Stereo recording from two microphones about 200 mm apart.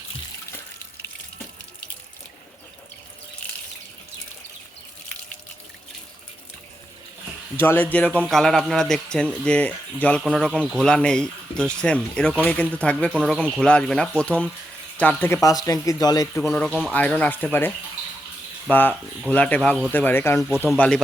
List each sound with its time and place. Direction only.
7.6 s a man's voice: 10° left (ahead or behind)
16.4 s a man's voice: 5° left (ahead or behind)